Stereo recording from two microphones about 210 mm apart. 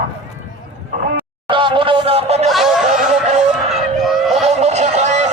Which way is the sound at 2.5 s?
Centre (ahead or behind).